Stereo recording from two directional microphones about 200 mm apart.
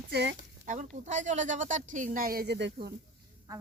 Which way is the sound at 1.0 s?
35° right (ahead or behind).